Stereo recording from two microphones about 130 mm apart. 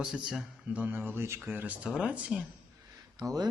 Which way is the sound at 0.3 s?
10° right (ahead or behind).